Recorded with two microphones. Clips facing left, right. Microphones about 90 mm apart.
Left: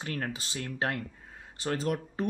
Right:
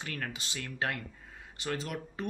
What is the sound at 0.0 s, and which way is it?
Speech, 35° left (ahead or behind).